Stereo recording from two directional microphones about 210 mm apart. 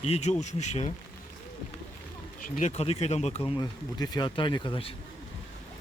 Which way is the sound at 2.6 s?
30° left (ahead or behind).